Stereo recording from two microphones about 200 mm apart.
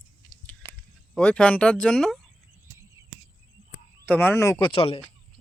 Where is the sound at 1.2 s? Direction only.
5° left (ahead or behind).